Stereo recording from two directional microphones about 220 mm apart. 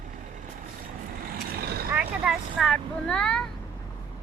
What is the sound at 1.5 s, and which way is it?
Vehicle, 45° right (ahead or behind).